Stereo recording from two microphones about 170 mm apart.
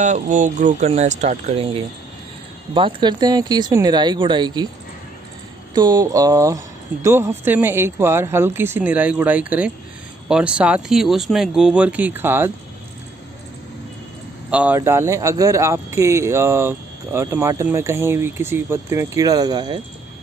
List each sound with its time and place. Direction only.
0.0 s speech: 45° right (ahead or behind); by 4.6 s 25° right (ahead or behind)
5.8 s speech: 25° right (ahead or behind)
14.5 s speech: 10° right (ahead or behind); by 19.8 s 25° right (ahead or behind)